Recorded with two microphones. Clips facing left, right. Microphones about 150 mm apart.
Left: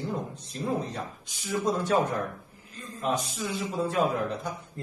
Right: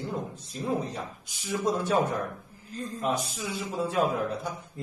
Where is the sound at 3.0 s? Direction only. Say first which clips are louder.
Left 1 dB; centre (ahead or behind).